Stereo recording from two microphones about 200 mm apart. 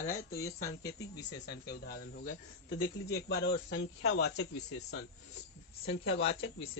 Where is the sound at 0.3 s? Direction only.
15° left (ahead or behind).